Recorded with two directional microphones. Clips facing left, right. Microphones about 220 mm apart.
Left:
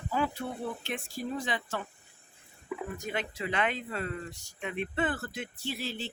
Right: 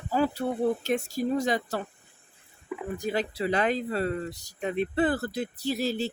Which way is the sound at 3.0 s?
35° right (ahead or behind).